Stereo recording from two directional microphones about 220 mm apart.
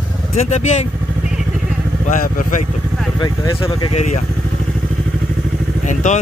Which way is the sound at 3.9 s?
30° left (ahead or behind).